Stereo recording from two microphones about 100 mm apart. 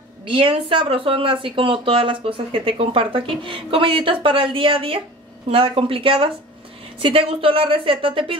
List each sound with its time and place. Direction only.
0.3 s speech: 60° right (ahead or behind)